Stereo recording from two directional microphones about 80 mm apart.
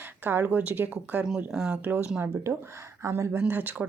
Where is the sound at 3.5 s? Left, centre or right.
Right.